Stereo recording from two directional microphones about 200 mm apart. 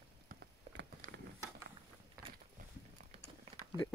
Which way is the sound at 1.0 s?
40° right (ahead or behind).